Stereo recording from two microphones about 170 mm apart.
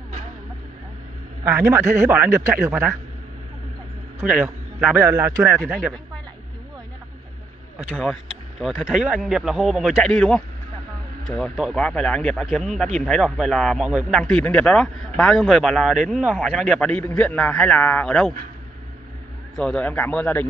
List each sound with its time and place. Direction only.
1.5 s speech: 15° right (ahead or behind)
4.2 s a man's voice: 10° right (ahead or behind)
7.9 s a man's voice: centre (ahead or behind)
19.6 s a man's voice: 5° left (ahead or behind)